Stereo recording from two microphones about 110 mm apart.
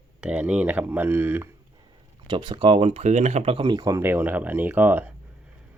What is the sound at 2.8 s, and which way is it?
Speech, 75° right (ahead or behind).